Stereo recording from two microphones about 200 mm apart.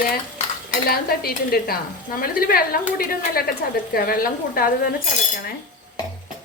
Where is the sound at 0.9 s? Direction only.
50° left (ahead or behind).